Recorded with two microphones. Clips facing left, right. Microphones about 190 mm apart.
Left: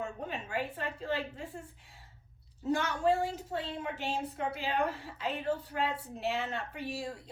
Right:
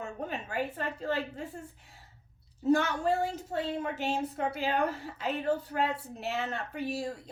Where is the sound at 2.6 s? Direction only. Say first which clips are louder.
Right 3 dB; 40° right (ahead or behind).